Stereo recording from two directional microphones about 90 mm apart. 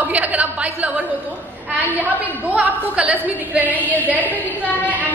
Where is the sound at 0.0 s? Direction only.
15° right (ahead or behind).